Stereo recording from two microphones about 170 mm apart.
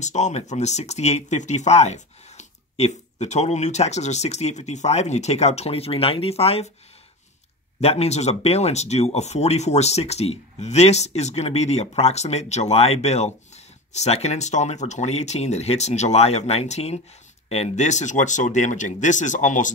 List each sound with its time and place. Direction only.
0.0 s speech: 40° left (ahead or behind)
7.8 s speech: 35° left (ahead or behind)